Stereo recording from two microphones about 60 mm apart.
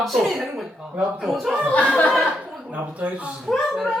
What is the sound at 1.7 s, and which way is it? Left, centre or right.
Speech, left.